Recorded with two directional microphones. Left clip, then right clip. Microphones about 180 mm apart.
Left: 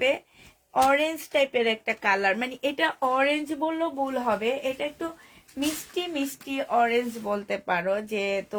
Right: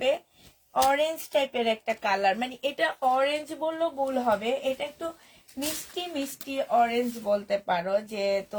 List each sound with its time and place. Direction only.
0.7 s speech: 45° left (ahead or behind)